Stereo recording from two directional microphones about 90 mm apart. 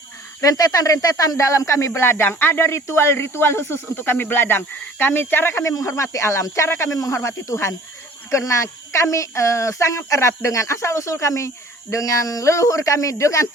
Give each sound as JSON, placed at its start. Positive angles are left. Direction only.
{"t": 0.4, "sound": "speech", "side_deg": 40}